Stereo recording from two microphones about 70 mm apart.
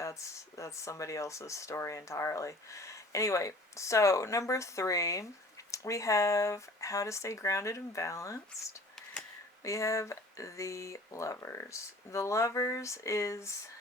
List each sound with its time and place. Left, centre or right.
0.0 s speech: left